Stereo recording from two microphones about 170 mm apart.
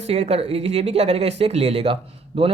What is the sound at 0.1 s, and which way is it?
Speech, 35° right (ahead or behind).